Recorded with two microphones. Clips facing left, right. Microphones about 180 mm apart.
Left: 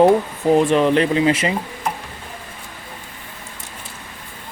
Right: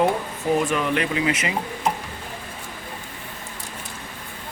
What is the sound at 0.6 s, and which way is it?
Speech, 30° left (ahead or behind).